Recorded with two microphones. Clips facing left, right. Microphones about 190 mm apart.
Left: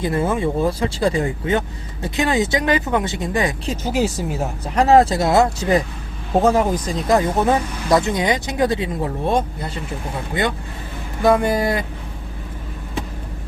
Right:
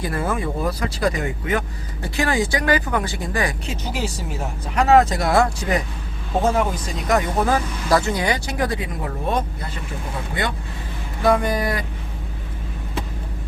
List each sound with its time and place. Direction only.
0.0 s speech: 25° left (ahead or behind)
3.7 s speech: 45° left (ahead or behind); by 9.4 s 25° left (ahead or behind)
11.3 s speech: 25° left (ahead or behind)